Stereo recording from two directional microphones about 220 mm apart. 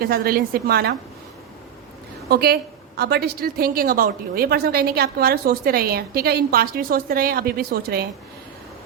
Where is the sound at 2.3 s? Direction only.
45° right (ahead or behind).